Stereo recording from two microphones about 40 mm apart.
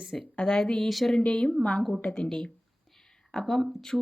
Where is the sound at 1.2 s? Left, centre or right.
Centre.